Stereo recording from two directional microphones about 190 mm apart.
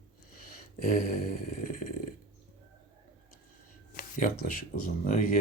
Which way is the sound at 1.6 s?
45° left (ahead or behind).